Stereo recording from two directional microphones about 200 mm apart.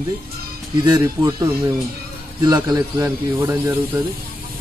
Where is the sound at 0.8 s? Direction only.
20° right (ahead or behind).